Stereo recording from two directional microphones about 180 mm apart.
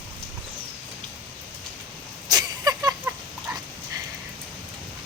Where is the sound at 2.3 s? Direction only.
20° right (ahead or behind).